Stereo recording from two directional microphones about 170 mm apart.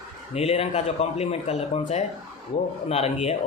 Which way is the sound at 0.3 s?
40° left (ahead or behind).